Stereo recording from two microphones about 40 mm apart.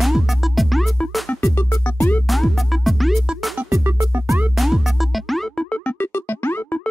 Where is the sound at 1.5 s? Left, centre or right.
Left.